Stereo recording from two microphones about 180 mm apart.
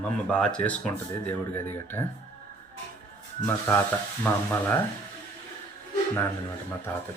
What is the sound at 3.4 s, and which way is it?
Speech, 15° left (ahead or behind).